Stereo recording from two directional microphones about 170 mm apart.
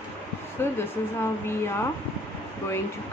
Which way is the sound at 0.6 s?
15° left (ahead or behind).